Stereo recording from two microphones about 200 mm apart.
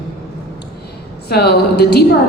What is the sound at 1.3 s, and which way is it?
Speech, 55° left (ahead or behind).